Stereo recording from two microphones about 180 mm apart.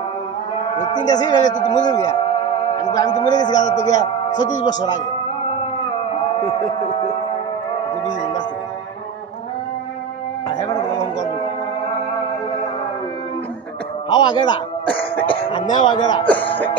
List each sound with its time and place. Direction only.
1.0 s speech: 20° left (ahead or behind)
3.6 s speech: 40° left (ahead or behind)
4.6 s speech: 25° left (ahead or behind)
14.0 s speech: 25° left (ahead or behind)
15.2 s music: 30° left (ahead or behind)
15.7 s speech: 25° left (ahead or behind)
16.3 s music: 10° left (ahead or behind)